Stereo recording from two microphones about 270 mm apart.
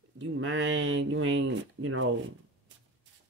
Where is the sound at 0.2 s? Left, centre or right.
Right.